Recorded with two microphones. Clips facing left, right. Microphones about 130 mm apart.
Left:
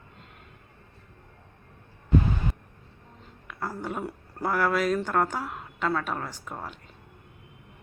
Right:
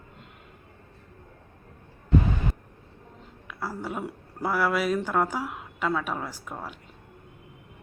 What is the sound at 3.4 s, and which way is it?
Speech, 5° right (ahead or behind).